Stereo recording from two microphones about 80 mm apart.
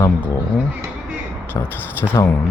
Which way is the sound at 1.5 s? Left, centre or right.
Left.